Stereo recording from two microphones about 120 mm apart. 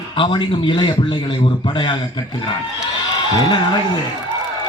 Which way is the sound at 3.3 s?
40° left (ahead or behind).